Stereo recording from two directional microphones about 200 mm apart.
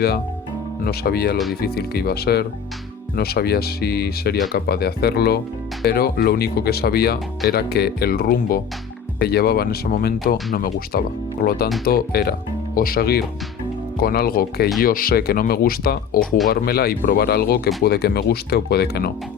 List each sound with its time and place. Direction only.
0.9 s speech: 50° left (ahead or behind)